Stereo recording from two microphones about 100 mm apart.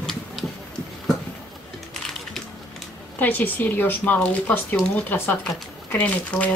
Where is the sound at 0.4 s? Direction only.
Centre (ahead or behind).